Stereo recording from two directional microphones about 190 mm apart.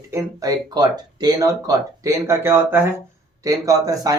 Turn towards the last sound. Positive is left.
turn(degrees=-20)  # may be behind; listen again after turning